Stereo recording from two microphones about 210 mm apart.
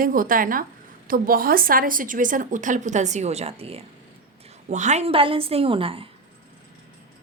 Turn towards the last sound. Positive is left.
turn(degrees=-25)  # may be behind; listen again after turning